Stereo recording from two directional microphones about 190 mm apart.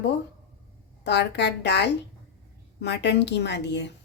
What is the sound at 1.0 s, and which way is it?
Speech, 65° left (ahead or behind).